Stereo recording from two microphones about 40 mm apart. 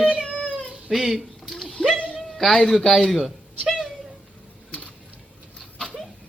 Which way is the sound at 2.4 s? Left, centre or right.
Centre.